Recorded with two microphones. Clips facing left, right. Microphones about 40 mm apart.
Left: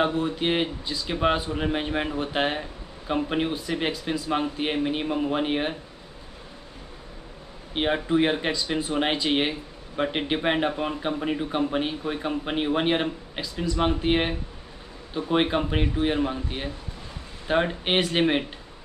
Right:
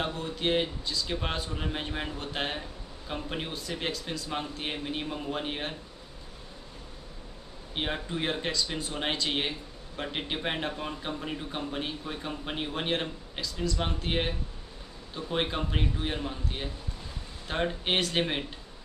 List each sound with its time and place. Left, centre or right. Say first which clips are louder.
0.0 s speech: left 7 dB; left
7.7 s speech: left 10 dB; left